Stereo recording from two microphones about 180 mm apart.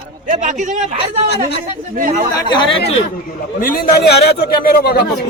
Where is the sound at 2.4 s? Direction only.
25° left (ahead or behind).